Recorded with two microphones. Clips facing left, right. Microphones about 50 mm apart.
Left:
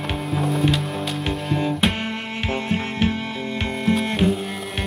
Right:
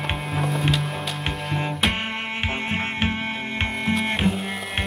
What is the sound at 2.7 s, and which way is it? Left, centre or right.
Music, right.